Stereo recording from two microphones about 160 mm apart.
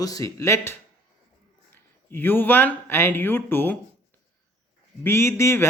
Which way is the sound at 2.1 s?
15° left (ahead or behind).